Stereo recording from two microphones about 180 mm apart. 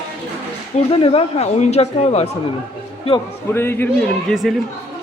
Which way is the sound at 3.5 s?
10° left (ahead or behind).